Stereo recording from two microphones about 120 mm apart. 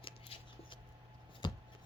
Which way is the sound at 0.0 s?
50° left (ahead or behind).